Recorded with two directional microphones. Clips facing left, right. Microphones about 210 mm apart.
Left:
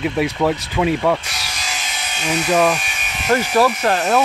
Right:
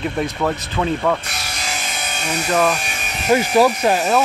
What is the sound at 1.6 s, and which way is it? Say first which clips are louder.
Electric shaver: right 3 dB; 55° right (ahead or behind).